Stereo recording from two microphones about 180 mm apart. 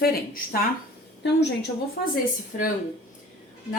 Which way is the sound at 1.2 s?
70° left (ahead or behind).